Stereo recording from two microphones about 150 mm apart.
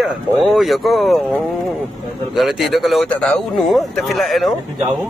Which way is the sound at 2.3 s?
5° right (ahead or behind).